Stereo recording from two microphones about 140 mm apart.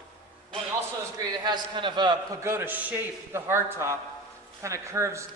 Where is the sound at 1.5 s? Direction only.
35° right (ahead or behind).